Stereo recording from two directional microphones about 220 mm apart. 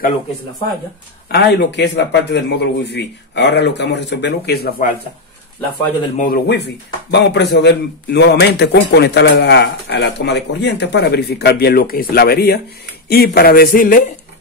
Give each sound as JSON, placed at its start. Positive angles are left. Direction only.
{"t": 1.3, "sound": "speech", "side_deg": 50}
{"t": 6.1, "sound": "speech", "side_deg": 40}